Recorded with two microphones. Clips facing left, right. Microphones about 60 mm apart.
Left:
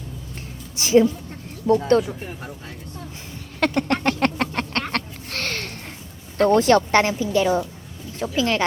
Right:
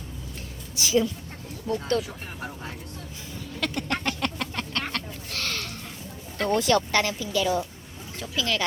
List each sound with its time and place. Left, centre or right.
0.8 s speech: left
3.6 s a sound: left
6.4 s speech: left